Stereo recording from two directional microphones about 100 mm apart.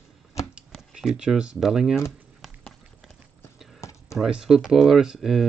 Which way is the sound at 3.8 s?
30° left (ahead or behind).